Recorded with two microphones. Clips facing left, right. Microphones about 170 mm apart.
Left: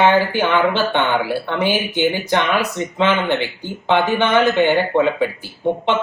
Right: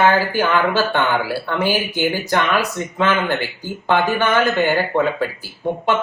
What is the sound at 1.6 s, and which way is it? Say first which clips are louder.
Speech: left 2 dB; 10° right (ahead or behind).